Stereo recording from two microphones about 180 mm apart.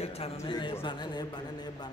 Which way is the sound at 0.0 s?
35° left (ahead or behind).